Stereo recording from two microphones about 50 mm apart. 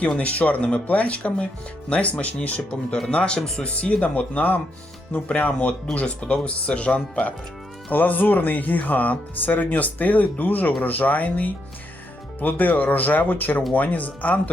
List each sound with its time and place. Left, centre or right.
0.2 s speech: left
3.6 s speech: left